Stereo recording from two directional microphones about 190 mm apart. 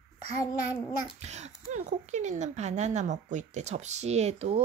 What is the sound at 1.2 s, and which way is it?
A woman's voice, 35° right (ahead or behind).